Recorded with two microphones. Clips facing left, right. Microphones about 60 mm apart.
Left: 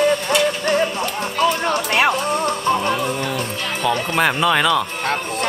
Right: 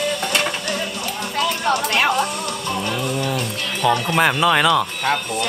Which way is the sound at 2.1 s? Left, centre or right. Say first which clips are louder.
Left 2 dB; left.